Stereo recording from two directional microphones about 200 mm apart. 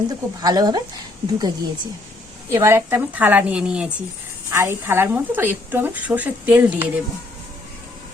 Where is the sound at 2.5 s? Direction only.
10° right (ahead or behind).